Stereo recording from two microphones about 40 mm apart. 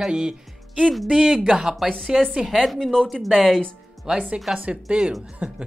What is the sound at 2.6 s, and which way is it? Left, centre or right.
Speech, centre.